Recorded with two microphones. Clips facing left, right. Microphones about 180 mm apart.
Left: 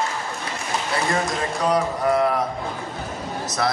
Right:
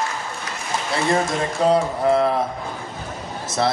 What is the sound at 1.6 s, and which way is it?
Speech, 25° right (ahead or behind).